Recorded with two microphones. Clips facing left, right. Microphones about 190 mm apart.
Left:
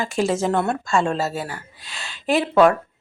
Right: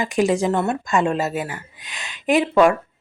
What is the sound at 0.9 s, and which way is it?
Speech, 15° right (ahead or behind).